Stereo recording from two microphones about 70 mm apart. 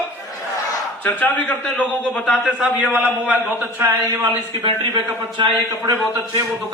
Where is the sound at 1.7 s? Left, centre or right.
Centre.